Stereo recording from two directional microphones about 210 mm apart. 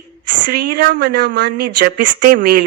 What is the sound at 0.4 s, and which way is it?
Speech, 45° right (ahead or behind).